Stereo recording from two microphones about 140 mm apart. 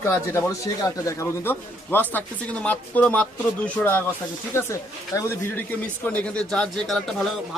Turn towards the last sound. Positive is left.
turn(degrees=5)  # may be behind; listen again after turning